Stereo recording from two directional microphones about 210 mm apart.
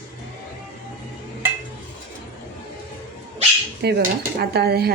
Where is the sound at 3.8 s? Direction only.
50° right (ahead or behind).